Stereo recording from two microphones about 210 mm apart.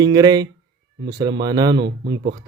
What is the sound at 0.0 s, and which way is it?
Speech, 20° right (ahead or behind).